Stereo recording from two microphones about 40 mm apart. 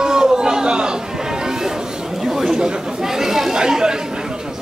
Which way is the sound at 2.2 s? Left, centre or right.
Centre.